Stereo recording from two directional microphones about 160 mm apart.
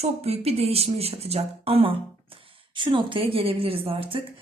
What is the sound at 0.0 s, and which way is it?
A woman's voice, 40° right (ahead or behind).